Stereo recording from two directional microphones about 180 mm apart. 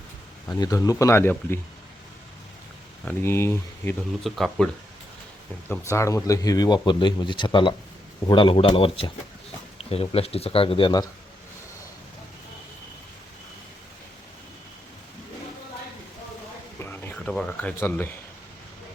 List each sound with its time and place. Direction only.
0.4 s speech: 15° left (ahead or behind)
3.0 s speech: 10° left (ahead or behind)
4.2 s speech: centre (ahead or behind)
5.9 s speech: 15° left (ahead or behind)
16.8 s a sound: 10° left (ahead or behind)